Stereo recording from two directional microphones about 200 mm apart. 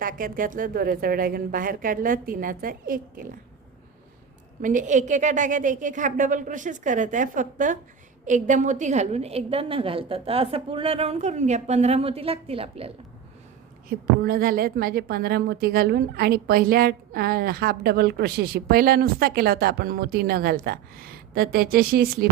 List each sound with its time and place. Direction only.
0.0 s a woman's voice: 45° right (ahead or behind)
4.6 s a woman's voice: 40° right (ahead or behind)
13.8 s a woman's voice: 45° right (ahead or behind)